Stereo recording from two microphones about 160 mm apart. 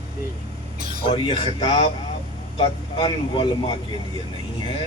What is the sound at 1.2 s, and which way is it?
Speech, 35° left (ahead or behind).